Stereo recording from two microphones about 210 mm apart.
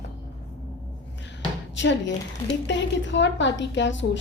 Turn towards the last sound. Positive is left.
turn(degrees=60)  # may be behind; listen again after turning